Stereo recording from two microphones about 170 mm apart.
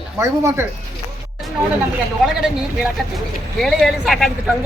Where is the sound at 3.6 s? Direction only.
Centre (ahead or behind).